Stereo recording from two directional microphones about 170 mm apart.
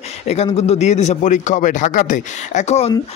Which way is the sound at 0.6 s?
40° left (ahead or behind).